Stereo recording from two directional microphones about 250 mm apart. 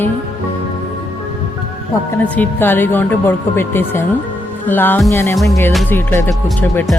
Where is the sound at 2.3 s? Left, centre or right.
Centre.